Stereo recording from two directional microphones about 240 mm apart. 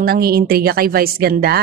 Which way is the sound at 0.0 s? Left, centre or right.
Right.